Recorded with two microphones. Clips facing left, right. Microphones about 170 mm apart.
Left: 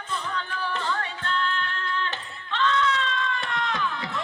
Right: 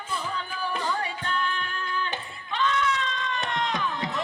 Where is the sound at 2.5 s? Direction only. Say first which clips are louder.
Left 2 dB; 15° right (ahead or behind).